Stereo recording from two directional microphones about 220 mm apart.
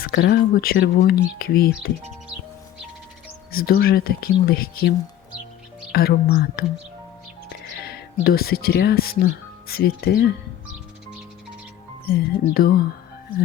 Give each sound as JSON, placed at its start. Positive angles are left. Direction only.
{"t": 0.0, "sound": "speech", "side_deg": 45}
{"t": 3.5, "sound": "speech", "side_deg": 45}
{"t": 12.1, "sound": "speech", "side_deg": 45}